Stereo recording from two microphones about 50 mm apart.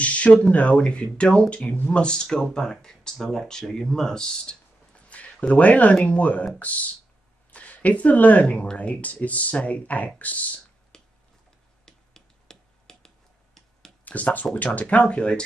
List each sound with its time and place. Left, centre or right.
0.0 s speech: left
5.1 s speech: left
10.9 s tick-tock: centre
11.8 s finger snapping: centre
14.0 s speech: left